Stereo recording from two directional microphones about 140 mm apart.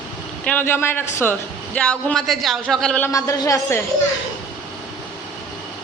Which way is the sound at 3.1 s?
20° left (ahead or behind).